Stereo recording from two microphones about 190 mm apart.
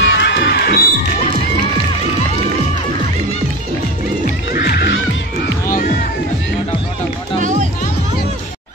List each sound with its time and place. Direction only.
0.0 s crowd: 70° left (ahead or behind)
4.5 s music: 55° left (ahead or behind)
7.3 s music: 40° right (ahead or behind)